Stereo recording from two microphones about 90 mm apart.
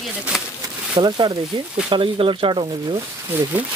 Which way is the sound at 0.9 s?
55° right (ahead or behind).